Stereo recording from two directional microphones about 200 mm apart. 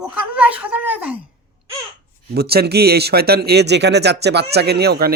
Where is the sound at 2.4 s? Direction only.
50° right (ahead or behind).